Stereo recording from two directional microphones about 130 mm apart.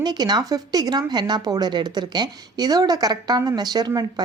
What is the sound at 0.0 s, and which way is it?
Speech, 35° right (ahead or behind).